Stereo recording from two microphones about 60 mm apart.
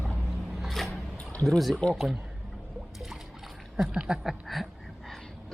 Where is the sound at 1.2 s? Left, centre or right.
Left.